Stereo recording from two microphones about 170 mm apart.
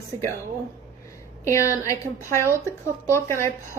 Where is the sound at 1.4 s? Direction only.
15° left (ahead or behind).